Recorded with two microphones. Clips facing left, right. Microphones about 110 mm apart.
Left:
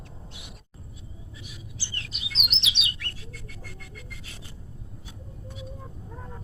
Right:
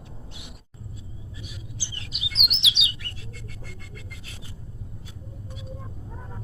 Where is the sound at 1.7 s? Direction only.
15° right (ahead or behind).